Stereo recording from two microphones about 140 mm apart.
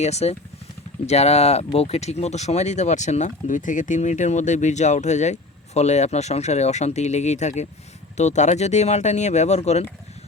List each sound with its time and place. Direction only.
0.0 s speech: 50° left (ahead or behind)